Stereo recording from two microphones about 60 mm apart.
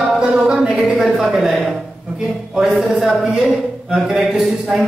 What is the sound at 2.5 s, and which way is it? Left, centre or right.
Speech, centre.